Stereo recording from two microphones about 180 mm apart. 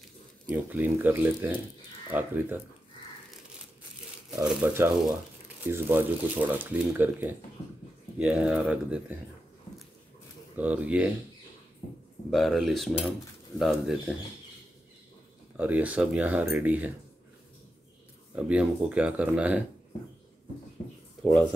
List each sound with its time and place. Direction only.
0.5 s speech: 10° right (ahead or behind)
4.5 s speech: 5° right (ahead or behind)
10.5 s speech: 10° right (ahead or behind)
12.3 s speech: centre (ahead or behind)
15.5 s speech: 10° right (ahead or behind)
18.3 s speech: 5° right (ahead or behind)